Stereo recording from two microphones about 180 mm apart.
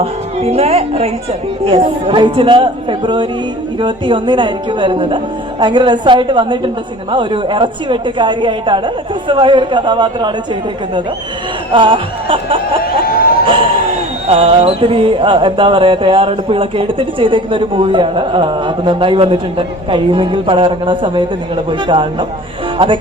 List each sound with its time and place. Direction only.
0.0 s a woman's voice: 35° right (ahead or behind)